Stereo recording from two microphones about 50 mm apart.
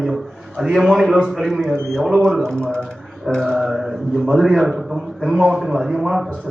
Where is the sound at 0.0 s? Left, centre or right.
Centre.